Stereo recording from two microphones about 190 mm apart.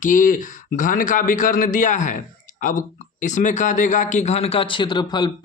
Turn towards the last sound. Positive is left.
turn(degrees=25)  # may be behind; listen again after turning